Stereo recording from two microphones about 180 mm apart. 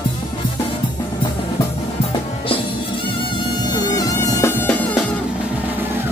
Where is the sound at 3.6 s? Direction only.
20° left (ahead or behind).